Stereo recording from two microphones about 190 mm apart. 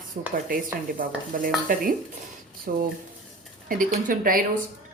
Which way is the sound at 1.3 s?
45° right (ahead or behind).